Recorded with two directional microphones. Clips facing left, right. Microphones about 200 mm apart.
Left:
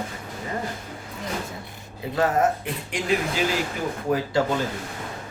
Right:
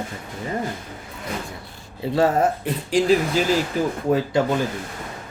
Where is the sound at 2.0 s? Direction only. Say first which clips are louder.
Right 4 dB; 30° right (ahead or behind).